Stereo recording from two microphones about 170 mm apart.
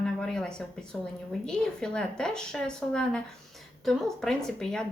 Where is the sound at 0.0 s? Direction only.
5° left (ahead or behind).